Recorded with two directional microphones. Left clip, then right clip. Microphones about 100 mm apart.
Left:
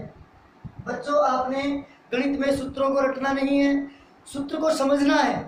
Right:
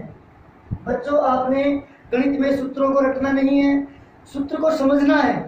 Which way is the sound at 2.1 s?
20° left (ahead or behind).